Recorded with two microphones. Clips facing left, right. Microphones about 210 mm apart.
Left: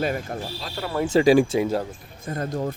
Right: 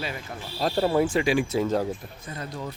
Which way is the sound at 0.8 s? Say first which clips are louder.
Right 7 dB; 35° right (ahead or behind).